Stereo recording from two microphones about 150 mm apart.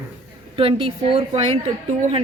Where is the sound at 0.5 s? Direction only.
40° right (ahead or behind).